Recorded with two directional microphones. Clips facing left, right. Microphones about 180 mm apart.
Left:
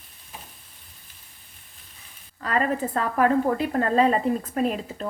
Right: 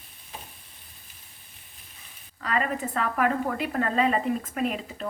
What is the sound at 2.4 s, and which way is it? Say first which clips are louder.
A woman's voice: left 3 dB; 40° left (ahead or behind).